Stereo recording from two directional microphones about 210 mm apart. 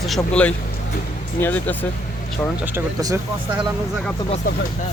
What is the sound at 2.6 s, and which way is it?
Speech, 10° right (ahead or behind).